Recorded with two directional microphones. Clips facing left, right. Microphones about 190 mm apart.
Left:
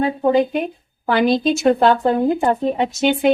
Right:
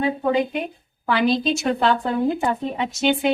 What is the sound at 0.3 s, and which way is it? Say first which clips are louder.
Speech: left 8 dB; 45° left (ahead or behind).